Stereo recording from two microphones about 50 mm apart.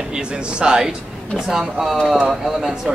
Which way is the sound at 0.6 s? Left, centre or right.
Centre.